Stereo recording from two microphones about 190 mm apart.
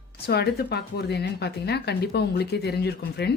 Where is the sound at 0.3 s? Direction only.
60° left (ahead or behind).